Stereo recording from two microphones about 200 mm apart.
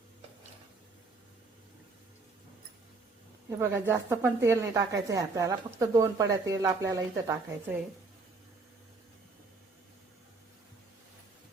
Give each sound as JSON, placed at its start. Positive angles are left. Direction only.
{"t": 3.6, "sound": "a woman's voice", "side_deg": -10}